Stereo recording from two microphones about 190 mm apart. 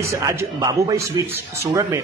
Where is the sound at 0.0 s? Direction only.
15° right (ahead or behind).